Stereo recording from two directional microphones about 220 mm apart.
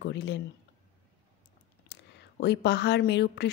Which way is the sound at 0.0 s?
50° left (ahead or behind).